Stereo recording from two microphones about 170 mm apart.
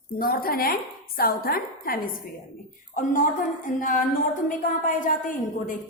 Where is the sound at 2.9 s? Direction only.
50° left (ahead or behind).